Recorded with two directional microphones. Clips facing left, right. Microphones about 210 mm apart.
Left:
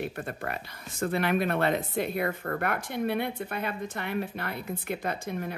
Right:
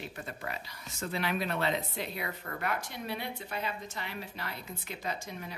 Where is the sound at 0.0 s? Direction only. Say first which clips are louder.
Left 7 dB; 55° left (ahead or behind).